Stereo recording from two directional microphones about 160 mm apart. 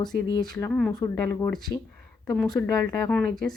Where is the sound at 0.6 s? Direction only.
5° left (ahead or behind).